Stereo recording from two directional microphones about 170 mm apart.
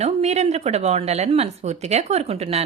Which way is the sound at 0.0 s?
40° right (ahead or behind).